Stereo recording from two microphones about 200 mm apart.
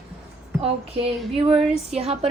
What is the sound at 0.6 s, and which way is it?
Speech, 30° right (ahead or behind).